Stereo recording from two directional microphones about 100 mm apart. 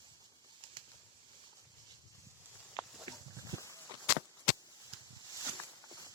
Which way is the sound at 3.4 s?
35° right (ahead or behind).